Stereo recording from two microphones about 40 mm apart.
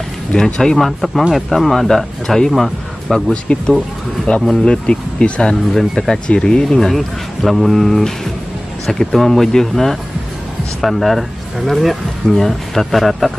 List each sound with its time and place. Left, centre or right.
0.3 s speech: centre
0.7 s speech: centre
4.3 s speech: left
4.6 s speech: left
6.9 s speech: centre